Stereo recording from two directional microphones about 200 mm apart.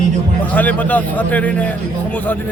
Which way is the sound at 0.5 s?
10° left (ahead or behind).